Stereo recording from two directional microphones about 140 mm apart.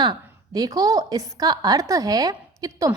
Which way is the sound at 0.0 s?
30° right (ahead or behind).